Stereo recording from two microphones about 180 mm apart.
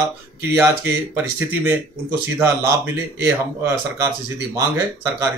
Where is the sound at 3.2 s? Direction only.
15° right (ahead or behind).